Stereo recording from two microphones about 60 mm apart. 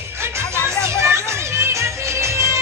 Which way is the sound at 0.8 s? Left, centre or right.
Right.